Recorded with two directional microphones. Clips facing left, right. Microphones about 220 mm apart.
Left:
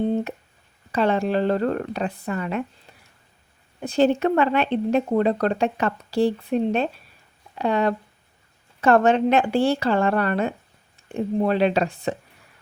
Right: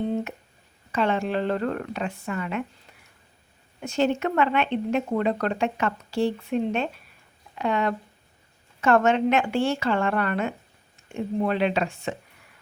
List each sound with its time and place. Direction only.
0.9 s speech: 35° left (ahead or behind)
3.8 s speech: 35° left (ahead or behind)